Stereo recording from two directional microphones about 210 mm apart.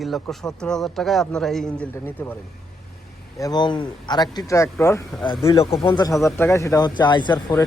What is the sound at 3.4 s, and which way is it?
Speech, 20° left (ahead or behind).